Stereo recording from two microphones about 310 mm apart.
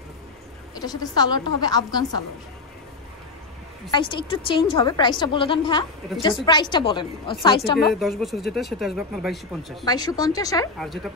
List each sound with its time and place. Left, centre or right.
0.7 s a woman's voice: centre
3.9 s a woman's voice: centre
7.9 s speech: centre
9.8 s a woman's voice: centre